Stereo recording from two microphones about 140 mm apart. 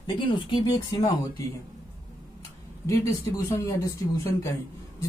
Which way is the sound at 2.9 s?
25° left (ahead or behind).